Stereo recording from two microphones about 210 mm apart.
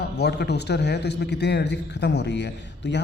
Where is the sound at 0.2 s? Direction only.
50° left (ahead or behind).